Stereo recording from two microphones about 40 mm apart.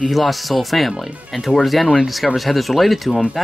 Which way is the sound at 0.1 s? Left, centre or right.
Centre.